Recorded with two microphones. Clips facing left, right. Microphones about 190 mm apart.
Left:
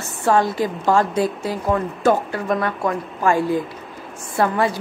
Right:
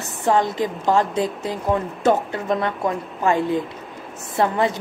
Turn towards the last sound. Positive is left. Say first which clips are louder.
# left 1 dB
turn(degrees=-20)  # may be behind; listen again after turning